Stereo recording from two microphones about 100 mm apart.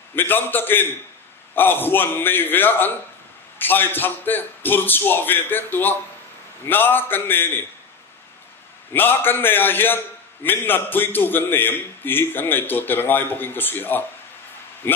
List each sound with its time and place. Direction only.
0.1 s a man's voice: 20° left (ahead or behind)
8.9 s a man's voice: 20° left (ahead or behind)